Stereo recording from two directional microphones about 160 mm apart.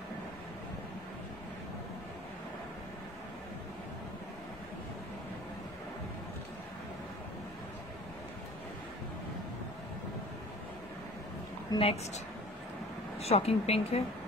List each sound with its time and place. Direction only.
11.7 s speech: 25° left (ahead or behind)
13.2 s a woman's voice: 40° left (ahead or behind)